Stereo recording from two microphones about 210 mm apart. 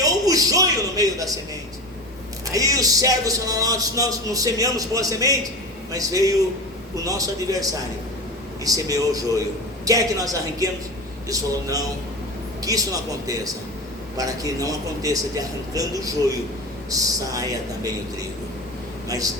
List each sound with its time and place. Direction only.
0.0 s a sound: 15° right (ahead or behind)
2.5 s speech: 15° right (ahead or behind)
19.0 s speech: 15° right (ahead or behind)